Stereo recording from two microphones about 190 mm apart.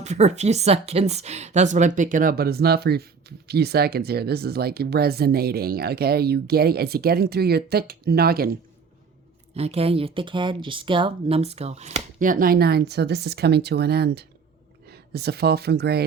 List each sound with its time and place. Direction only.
0.0 s a woman's voice: 35° right (ahead or behind); by 8.5 s 55° right (ahead or behind)
9.6 s speech: 30° right (ahead or behind); by 16.0 s 60° right (ahead or behind)